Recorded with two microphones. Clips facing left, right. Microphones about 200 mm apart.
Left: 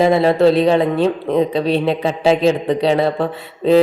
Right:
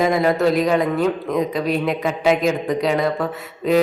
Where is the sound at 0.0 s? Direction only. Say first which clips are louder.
Left 5 dB; 30° left (ahead or behind).